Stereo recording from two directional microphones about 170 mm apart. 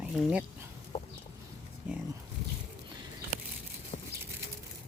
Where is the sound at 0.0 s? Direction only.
5° right (ahead or behind).